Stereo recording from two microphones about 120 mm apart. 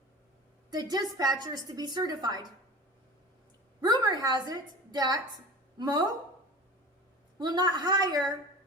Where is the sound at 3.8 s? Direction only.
35° right (ahead or behind).